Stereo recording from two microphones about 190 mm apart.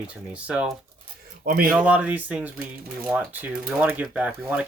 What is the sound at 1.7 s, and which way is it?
Speech, 10° right (ahead or behind).